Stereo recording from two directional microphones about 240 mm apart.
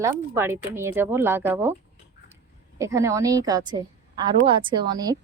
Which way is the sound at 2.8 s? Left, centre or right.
Centre.